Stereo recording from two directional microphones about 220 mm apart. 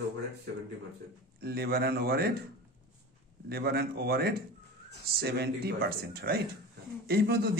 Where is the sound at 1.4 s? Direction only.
45° right (ahead or behind).